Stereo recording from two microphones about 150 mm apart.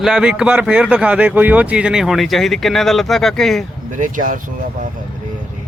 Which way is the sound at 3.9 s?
60° right (ahead or behind).